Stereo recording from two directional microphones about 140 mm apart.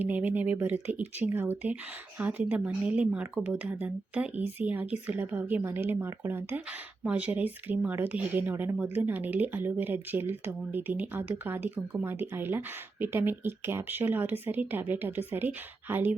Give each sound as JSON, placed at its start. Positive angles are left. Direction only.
{"t": 0.1, "sound": "speech", "side_deg": -10}